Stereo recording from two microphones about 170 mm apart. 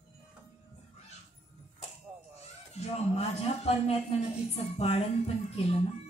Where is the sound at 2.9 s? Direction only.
35° left (ahead or behind).